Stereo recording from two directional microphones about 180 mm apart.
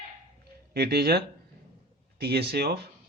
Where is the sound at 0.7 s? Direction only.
65° right (ahead or behind).